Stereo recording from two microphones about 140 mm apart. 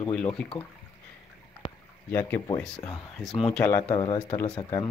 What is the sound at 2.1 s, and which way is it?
Speech, 15° left (ahead or behind).